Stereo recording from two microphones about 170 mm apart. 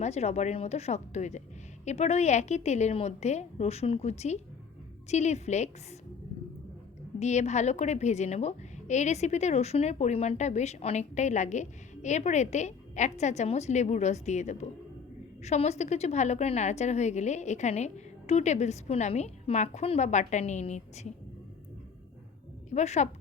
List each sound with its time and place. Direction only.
0.0 s a woman's voice: 40° left (ahead or behind)
7.2 s a woman's voice: 40° left (ahead or behind)
22.7 s a woman's voice: 40° left (ahead or behind)